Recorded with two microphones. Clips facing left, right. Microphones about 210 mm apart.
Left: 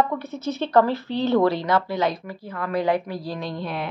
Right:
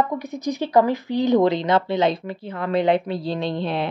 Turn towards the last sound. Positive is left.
turn(degrees=-25)  # may be behind; listen again after turning